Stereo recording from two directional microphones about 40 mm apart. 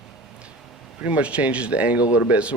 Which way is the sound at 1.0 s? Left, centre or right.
Right.